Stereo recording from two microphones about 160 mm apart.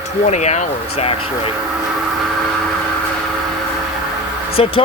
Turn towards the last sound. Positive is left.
turn(degrees=40)  # may be behind; listen again after turning